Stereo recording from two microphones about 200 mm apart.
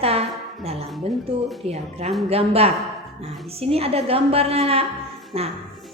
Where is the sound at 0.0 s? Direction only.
30° right (ahead or behind).